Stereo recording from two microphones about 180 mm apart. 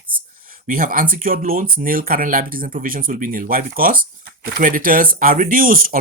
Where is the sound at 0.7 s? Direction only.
50° right (ahead or behind).